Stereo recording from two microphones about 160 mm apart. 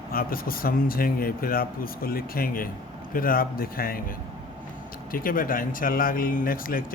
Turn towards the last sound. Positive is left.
turn(degrees=60)  # may be behind; listen again after turning